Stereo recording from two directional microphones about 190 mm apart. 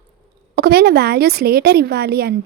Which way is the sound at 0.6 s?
55° right (ahead or behind).